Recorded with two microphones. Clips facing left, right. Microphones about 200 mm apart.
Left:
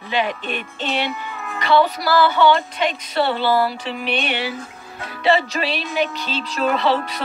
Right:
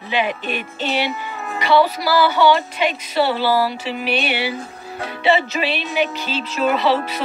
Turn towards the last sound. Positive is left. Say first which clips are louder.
# right 1 dB
turn(degrees=-5)  # may be behind; listen again after turning